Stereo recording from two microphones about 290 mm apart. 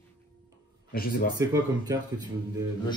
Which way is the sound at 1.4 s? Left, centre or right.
Centre.